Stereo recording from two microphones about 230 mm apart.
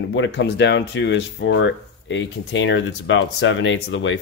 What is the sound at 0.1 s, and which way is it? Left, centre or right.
Speech, left.